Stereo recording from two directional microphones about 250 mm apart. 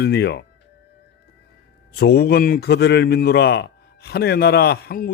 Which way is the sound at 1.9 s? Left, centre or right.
Left.